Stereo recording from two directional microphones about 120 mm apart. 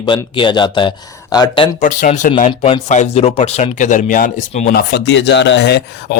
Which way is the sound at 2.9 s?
70° left (ahead or behind).